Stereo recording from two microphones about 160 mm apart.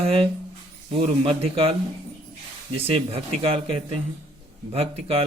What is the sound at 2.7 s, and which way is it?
Speech, 35° right (ahead or behind).